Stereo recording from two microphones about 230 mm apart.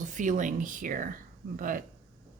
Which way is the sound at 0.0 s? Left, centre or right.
Right.